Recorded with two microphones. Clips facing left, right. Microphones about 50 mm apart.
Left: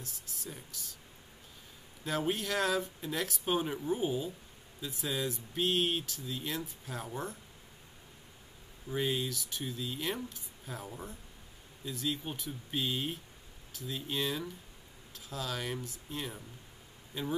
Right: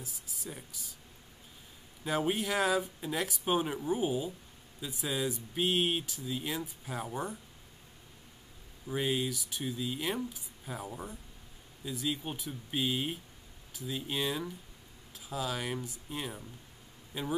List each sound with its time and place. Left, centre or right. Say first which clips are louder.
0.0 s speech: right 1 dB; centre
2.0 s speech: right 2 dB; centre
8.8 s speech: right 1 dB; centre